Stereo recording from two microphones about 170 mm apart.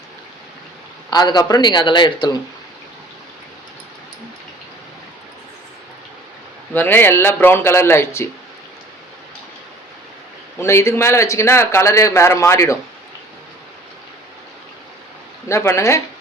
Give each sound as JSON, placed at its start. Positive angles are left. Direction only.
{"t": 1.1, "sound": "a man's voice", "side_deg": 25}
{"t": 6.7, "sound": "a man's voice", "side_deg": 10}
{"t": 10.6, "sound": "a man's voice", "side_deg": 15}
{"t": 15.4, "sound": "a man's voice", "side_deg": 15}